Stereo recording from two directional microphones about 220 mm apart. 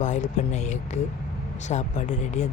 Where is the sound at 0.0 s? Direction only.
35° left (ahead or behind).